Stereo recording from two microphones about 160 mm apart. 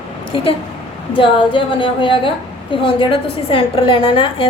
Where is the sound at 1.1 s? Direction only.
30° left (ahead or behind).